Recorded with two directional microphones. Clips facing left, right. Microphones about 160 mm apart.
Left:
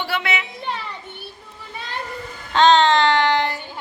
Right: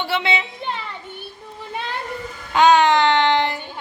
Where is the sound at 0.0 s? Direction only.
25° right (ahead or behind).